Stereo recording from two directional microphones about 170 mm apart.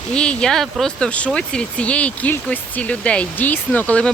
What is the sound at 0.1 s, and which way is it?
Speech, 5° left (ahead or behind).